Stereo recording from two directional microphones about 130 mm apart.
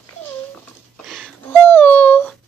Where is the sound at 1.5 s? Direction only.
15° left (ahead or behind).